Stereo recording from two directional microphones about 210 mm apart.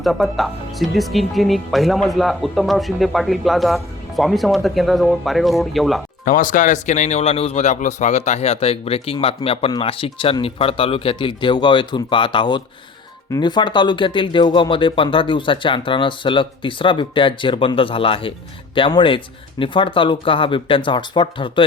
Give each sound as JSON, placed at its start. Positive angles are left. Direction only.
{"t": 0.0, "sound": "speech", "side_deg": 0}
{"t": 6.2, "sound": "speech", "side_deg": 40}